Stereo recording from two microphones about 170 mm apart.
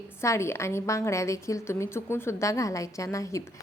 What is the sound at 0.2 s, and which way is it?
A woman's voice, 15° left (ahead or behind).